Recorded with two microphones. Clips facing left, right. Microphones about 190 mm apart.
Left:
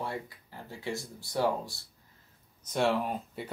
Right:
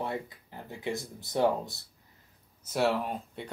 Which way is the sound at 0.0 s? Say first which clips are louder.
Right 2 dB; 20° right (ahead or behind).